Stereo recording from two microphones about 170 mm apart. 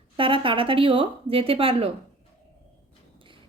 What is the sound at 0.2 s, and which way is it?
A woman's voice, 30° right (ahead or behind).